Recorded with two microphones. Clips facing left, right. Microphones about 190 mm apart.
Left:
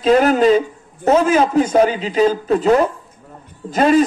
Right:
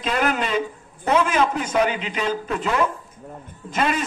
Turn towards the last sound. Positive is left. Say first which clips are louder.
# left 10 dB
turn(degrees=40)  # may be behind; listen again after turning